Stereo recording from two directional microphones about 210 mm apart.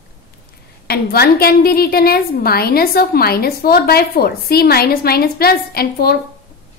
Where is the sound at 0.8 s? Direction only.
50° left (ahead or behind).